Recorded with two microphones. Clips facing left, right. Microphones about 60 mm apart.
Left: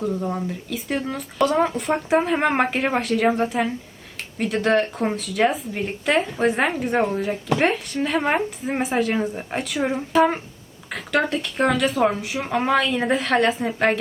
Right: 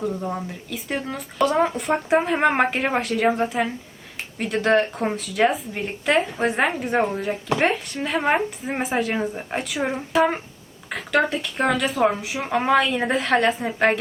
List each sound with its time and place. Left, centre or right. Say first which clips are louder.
0.0 s speech: left 2 dB; centre